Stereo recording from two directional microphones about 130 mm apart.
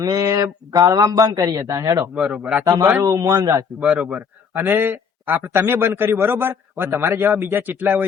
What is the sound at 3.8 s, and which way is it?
A man's voice, 10° right (ahead or behind).